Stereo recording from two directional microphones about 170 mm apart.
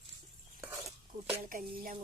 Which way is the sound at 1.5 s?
55° right (ahead or behind).